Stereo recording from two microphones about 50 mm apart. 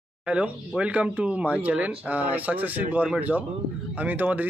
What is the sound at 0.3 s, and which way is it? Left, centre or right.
Speech, right.